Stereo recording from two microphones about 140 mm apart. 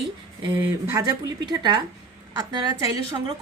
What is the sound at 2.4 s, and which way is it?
Speech, 25° right (ahead or behind).